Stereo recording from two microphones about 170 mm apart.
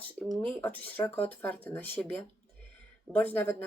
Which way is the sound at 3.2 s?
10° left (ahead or behind).